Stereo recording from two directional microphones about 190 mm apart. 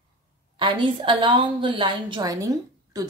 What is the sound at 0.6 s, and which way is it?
A woman's voice, 25° right (ahead or behind).